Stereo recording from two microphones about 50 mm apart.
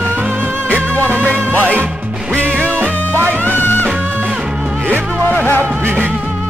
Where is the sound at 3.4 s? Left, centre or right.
Left.